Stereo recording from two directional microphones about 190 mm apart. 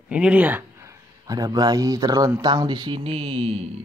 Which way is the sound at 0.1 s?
5° right (ahead or behind).